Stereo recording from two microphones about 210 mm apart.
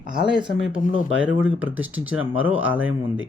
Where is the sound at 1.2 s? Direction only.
5° right (ahead or behind).